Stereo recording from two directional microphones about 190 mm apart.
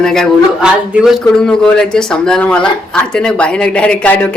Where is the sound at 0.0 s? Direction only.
Centre (ahead or behind).